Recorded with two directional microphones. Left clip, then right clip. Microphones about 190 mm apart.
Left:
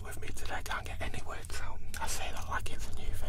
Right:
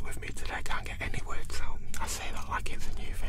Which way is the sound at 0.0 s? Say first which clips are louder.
Right 3 dB; 35° right (ahead or behind).